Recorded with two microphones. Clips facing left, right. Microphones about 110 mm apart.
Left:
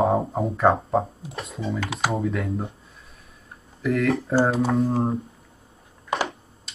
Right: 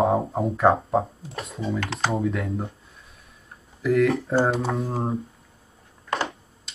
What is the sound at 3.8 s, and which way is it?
Speech, centre (ahead or behind).